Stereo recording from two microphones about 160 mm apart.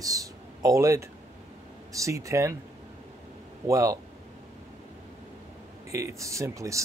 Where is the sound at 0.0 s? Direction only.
20° right (ahead or behind).